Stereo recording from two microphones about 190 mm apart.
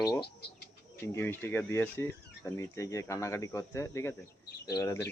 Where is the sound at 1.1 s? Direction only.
10° left (ahead or behind).